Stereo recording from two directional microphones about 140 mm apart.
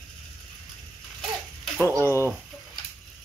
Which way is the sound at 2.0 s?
20° left (ahead or behind).